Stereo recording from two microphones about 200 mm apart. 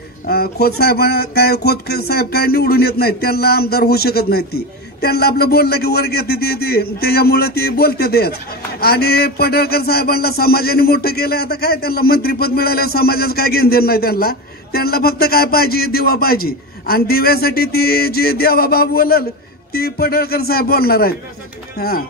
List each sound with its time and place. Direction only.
0.3 s speech: 50° left (ahead or behind)